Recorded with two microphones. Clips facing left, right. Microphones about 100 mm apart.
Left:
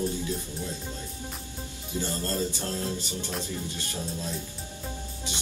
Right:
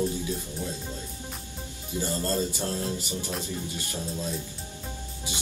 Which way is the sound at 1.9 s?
15° right (ahead or behind).